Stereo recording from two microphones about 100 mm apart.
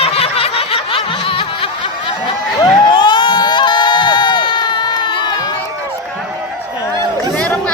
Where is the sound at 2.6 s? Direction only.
50° left (ahead or behind).